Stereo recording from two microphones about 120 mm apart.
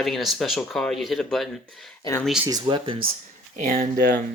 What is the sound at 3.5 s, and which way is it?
Speech, 90° right.